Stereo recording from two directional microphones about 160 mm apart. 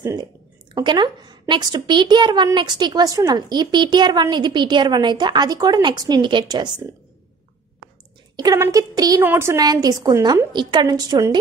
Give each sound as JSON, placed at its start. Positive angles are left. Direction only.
{"t": 0.0, "sound": "a woman's voice", "side_deg": -20}
{"t": 8.4, "sound": "a woman's voice", "side_deg": -20}